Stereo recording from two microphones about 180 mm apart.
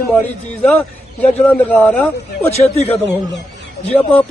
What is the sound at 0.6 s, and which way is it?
A man's voice, 5° left (ahead or behind).